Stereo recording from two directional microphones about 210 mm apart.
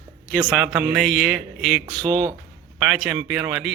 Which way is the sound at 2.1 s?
20° right (ahead or behind).